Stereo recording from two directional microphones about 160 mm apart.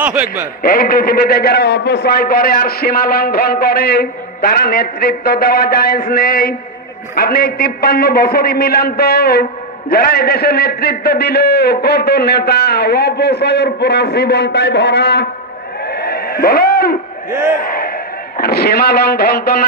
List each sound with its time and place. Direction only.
0.0 s a man's voice: 10° right (ahead or behind)
0.6 s a man's voice: 65° left (ahead or behind); by 15.2 s 90° left
15.8 s a sound: 80° left
17.5 s a man's voice: 65° left (ahead or behind); by 19.6 s 80° left